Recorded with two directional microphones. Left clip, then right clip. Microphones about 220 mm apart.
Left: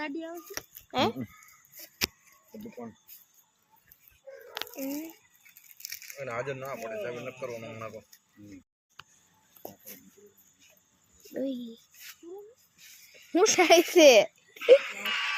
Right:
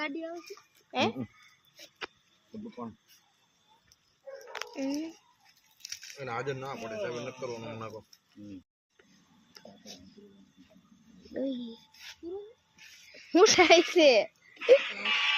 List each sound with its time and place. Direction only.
0.0 s speech: 30° left (ahead or behind)
0.9 s speech: 15° left (ahead or behind)
4.7 s speech: 10° right (ahead or behind)
6.1 s a man's voice: 45° right (ahead or behind)
11.3 s speech: 5° left (ahead or behind)
13.5 s speech: 5° left (ahead or behind)
13.9 s a child's voice: 20° left (ahead or behind)
14.6 s speech: 10° right (ahead or behind)
15.0 s a sound: 10° right (ahead or behind)